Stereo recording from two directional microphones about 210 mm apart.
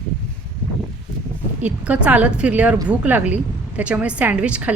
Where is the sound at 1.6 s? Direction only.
5° right (ahead or behind).